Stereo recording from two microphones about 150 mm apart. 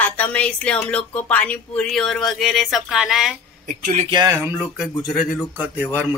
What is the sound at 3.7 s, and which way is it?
Speech, 60° right (ahead or behind).